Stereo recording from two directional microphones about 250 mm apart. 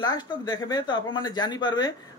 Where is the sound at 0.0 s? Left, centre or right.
Centre.